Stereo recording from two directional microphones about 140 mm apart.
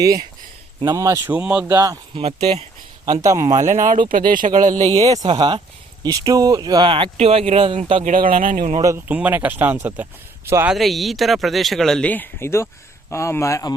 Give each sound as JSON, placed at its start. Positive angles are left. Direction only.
{"t": 0.8, "sound": "speech", "side_deg": -25}
{"t": 1.3, "sound": "speech", "side_deg": -10}
{"t": 1.6, "sound": "speech", "side_deg": -25}
{"t": 2.1, "sound": "speech", "side_deg": -50}
{"t": 3.1, "sound": "speech", "side_deg": -25}
{"t": 3.7, "sound": "speech", "side_deg": -70}
{"t": 4.1, "sound": "speech", "side_deg": -80}
{"t": 4.9, "sound": "speech", "side_deg": -25}
{"t": 8.0, "sound": "speech", "side_deg": -75}
{"t": 9.0, "sound": "speech", "side_deg": -10}
{"t": 10.7, "sound": "speech", "side_deg": 0}